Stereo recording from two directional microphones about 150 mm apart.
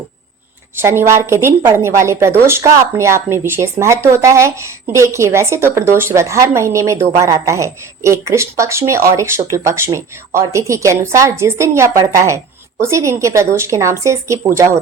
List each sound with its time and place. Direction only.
0.8 s speech: 15° right (ahead or behind)